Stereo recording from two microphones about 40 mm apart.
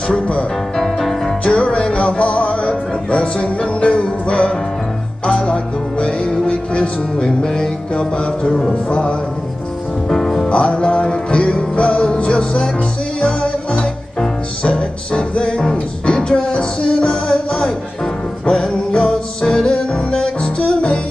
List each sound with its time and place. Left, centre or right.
0.1 s speech: left
0.7 s music: centre
1.4 s music: left
7.2 s music: centre
10.0 s music: centre
10.5 s music: left
18.9 s music: centre